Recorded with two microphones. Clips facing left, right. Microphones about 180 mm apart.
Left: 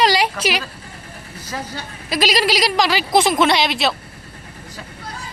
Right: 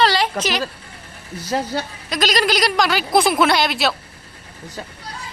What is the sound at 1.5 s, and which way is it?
Speech, 65° right (ahead or behind).